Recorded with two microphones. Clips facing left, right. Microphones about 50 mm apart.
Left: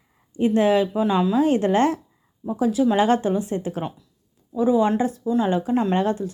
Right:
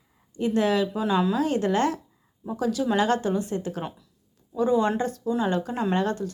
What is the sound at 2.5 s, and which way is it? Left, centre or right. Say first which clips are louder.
A woman's voice: left 5 dB; centre.